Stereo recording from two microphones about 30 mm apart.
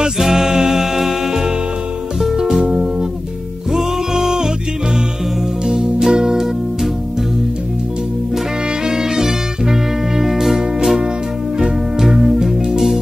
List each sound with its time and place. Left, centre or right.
0.2 s music: centre
3.7 s music: centre
5.7 s music: centre
8.8 s music: centre
12.0 s music: centre